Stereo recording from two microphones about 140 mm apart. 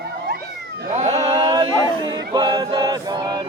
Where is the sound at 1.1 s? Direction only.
30° right (ahead or behind).